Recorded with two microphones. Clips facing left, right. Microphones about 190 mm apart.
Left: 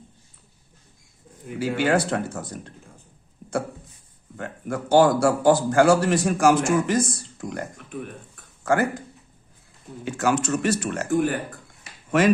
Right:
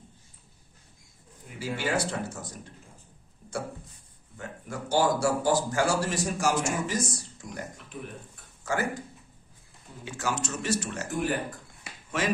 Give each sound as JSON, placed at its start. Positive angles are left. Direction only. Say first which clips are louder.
{"t": 1.5, "sound": "a man's voice", "louder": "left 8 dB", "side_deg": 65}
{"t": 4.4, "sound": "a man's voice", "louder": "left 8 dB", "side_deg": 60}
{"t": 10.0, "sound": "a man's voice", "louder": "left 9 dB", "side_deg": 60}